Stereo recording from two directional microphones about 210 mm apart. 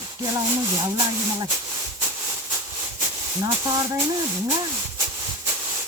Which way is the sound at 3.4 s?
15° right (ahead or behind).